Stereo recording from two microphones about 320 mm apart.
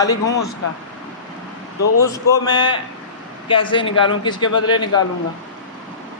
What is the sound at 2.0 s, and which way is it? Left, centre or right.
Speech, centre.